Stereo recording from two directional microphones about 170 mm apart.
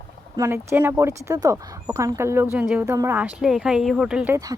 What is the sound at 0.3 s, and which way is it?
A man's voice, 15° right (ahead or behind).